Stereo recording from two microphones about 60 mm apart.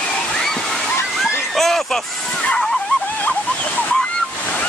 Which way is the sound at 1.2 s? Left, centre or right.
Centre.